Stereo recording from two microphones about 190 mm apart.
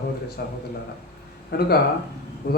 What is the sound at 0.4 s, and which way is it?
A man's voice, 55° left (ahead or behind).